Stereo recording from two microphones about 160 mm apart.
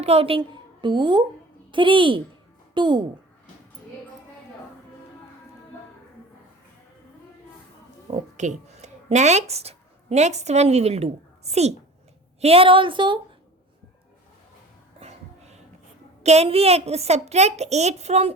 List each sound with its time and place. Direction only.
0.0 s a woman's voice: 40° right (ahead or behind)
8.0 s a woman's voice: 45° right (ahead or behind)
14.9 s a sound: 40° right (ahead or behind)
16.2 s a woman's voice: 40° right (ahead or behind)